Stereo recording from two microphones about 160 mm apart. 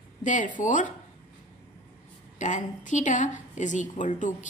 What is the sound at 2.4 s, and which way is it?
A woman's voice, 50° left (ahead or behind).